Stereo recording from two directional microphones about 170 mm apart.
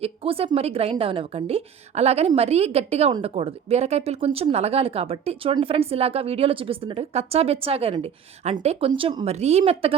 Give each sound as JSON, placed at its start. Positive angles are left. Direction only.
{"t": 0.0, "sound": "a woman's voice", "side_deg": -35}